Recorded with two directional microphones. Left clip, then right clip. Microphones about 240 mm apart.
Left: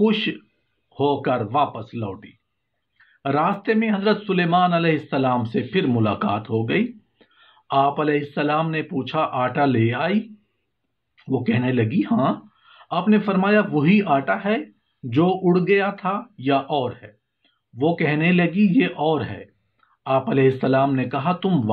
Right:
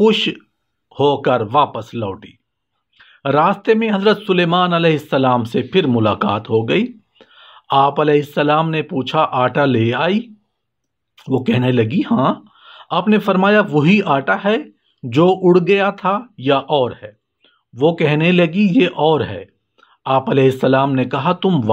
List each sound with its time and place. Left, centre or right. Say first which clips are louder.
0.0 s speech: right 7 dB; right